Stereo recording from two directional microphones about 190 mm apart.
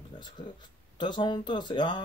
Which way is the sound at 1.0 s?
25° left (ahead or behind).